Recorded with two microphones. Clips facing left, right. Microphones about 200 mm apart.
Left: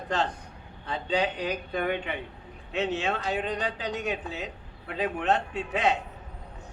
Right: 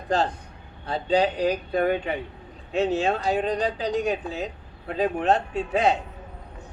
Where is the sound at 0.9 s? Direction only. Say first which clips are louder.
Right 6 dB; 40° right (ahead or behind).